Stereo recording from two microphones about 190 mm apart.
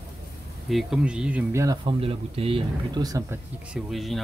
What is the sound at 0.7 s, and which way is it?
Speech, centre (ahead or behind).